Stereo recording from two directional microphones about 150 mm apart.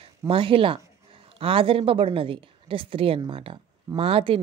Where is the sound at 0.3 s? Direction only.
35° right (ahead or behind).